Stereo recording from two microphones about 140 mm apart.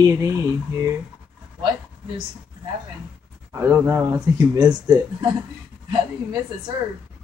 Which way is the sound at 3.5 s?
20° right (ahead or behind).